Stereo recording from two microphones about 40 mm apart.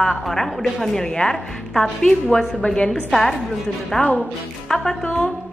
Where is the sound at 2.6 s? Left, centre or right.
Left.